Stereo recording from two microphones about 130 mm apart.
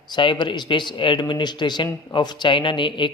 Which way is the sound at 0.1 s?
40° left (ahead or behind).